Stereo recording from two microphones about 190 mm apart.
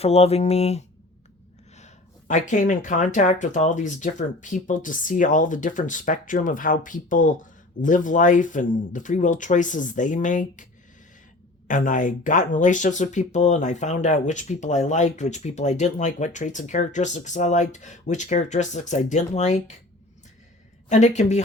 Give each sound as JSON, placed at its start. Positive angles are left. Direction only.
{"t": 0.0, "sound": "speech", "side_deg": 35}
{"t": 11.7, "sound": "speech", "side_deg": 45}
{"t": 20.9, "sound": "speech", "side_deg": 40}